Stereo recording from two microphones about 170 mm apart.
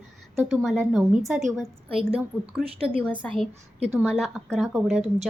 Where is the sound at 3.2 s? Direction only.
5° left (ahead or behind).